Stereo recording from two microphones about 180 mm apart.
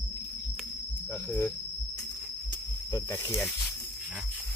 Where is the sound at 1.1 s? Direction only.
10° left (ahead or behind).